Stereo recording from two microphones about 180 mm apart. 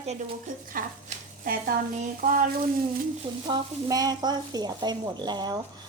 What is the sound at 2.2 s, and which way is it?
Frying, 50° right (ahead or behind).